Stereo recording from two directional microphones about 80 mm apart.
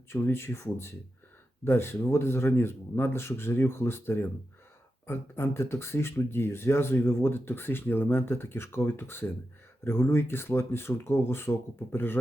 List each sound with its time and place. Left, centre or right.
0.1 s speech: left